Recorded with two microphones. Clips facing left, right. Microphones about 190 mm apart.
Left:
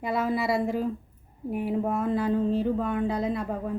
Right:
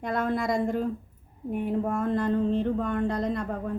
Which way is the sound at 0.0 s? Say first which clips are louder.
Left 1 dB; 5° left (ahead or behind).